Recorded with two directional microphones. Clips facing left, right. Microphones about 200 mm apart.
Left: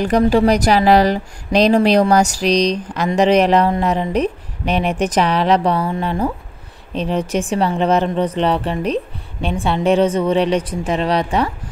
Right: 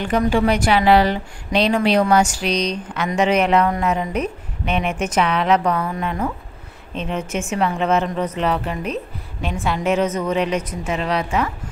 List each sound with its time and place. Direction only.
0.0 s a woman's voice: 40° left (ahead or behind)